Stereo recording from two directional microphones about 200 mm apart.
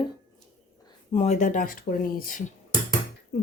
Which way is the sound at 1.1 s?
35° left (ahead or behind).